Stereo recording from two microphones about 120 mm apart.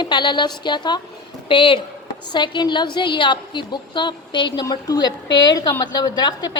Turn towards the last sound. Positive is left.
turn(degrees=35)  # may be behind; listen again after turning